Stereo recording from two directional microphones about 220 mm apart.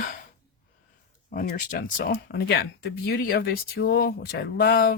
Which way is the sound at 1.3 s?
40° left (ahead or behind).